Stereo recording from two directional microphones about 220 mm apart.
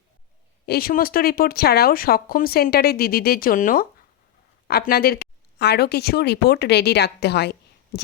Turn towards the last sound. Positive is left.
turn(degrees=50)  # may be behind; listen again after turning